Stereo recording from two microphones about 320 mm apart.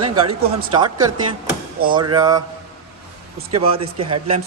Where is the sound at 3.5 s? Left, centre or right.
Centre.